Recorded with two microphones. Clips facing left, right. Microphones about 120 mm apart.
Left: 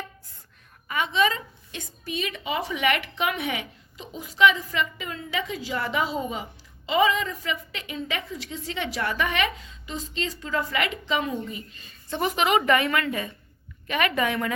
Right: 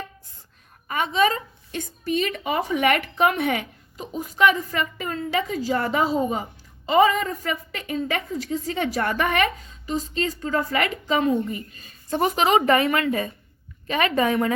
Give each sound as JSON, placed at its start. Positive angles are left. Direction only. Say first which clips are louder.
{"t": 0.9, "sound": "a woman's voice", "louder": "right 3 dB", "side_deg": -40}